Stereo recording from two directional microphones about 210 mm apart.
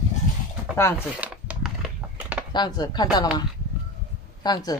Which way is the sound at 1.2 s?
5° right (ahead or behind).